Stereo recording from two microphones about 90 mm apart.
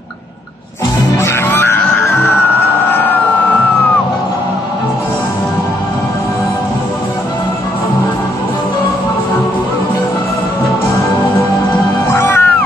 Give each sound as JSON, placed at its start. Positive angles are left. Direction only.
{"t": 1.1, "sound": "music", "side_deg": 25}
{"t": 2.9, "sound": "emergency vehicle", "side_deg": 20}
{"t": 12.1, "sound": "music", "side_deg": 25}